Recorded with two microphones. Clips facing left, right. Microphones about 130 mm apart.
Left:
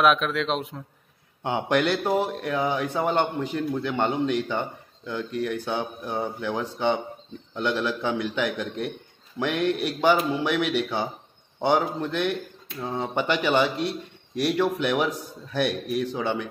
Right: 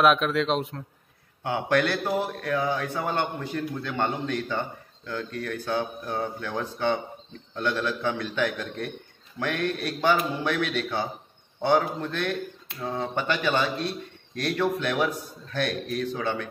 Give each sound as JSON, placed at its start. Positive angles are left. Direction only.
{"t": 0.0, "sound": "speech", "side_deg": 0}
{"t": 1.4, "sound": "a man's voice", "side_deg": 20}